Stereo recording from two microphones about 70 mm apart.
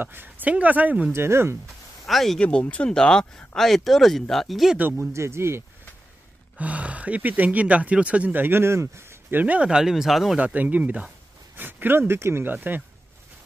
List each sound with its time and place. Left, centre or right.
0.0 s speech: right
1.1 s speech: right
2.0 s speech: centre
2.4 s speech: centre
4.7 s speech: right
5.1 s speech: right
6.6 s speech: centre; by 9.4 s right
9.4 s speech: centre
10.4 s speech: right
12.5 s speech: right